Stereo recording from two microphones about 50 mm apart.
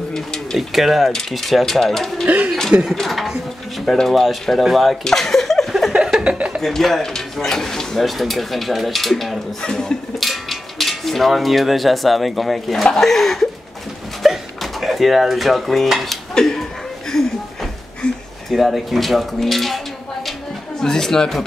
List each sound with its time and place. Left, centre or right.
0.1 s bird: centre
0.6 s speech: centre
2.2 s speech: right
2.9 s speech: centre
5.0 s a sound: centre
6.1 s speech: right
6.6 s speech: centre
9.6 s speech: centre
10.2 s speech: centre
14.2 s dishes: centre
16.3 s a sound: centre
18.5 s speech: centre
20.8 s speech: centre